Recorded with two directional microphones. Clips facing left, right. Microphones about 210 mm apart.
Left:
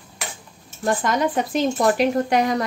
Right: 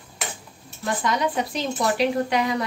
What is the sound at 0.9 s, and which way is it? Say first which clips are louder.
Speech: left 3 dB; 50° left (ahead or behind).